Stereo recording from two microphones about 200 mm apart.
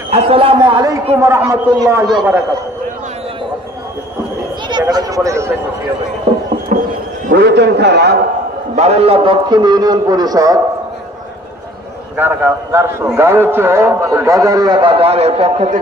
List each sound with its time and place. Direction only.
0.1 s a man's voice: 30° right (ahead or behind); by 2.0 s 15° right (ahead or behind)
4.6 s speech: 20° right (ahead or behind)
6.7 s a sound: 40° right (ahead or behind)
7.3 s a man's voice: 55° right (ahead or behind)
8.7 s a man's voice: 30° right (ahead or behind)
12.2 s a man's voice: 10° right (ahead or behind); by 15.8 s 35° right (ahead or behind)